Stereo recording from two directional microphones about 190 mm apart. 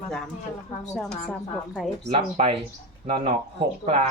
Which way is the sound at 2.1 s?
30° right (ahead or behind).